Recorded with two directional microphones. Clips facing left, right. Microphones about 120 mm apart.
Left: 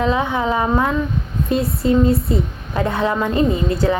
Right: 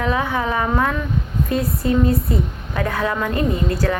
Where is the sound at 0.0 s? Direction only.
20° left (ahead or behind).